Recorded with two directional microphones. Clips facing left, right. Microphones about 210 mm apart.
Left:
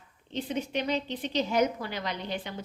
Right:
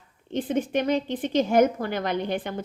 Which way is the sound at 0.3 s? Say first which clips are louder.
Right 6 dB; 50° right (ahead or behind).